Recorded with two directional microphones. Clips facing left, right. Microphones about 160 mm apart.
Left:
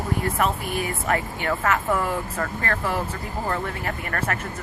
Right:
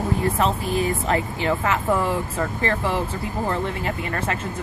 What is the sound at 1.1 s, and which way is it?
Speech, 20° right (ahead or behind).